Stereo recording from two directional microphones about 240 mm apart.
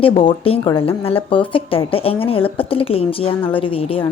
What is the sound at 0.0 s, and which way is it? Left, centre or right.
Speech, left.